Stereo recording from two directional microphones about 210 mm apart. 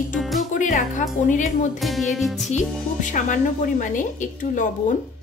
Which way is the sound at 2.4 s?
35° left (ahead or behind).